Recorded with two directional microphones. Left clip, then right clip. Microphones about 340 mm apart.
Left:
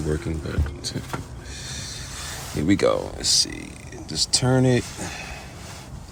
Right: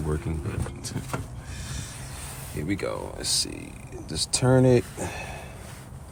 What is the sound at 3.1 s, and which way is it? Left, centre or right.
Speech, centre.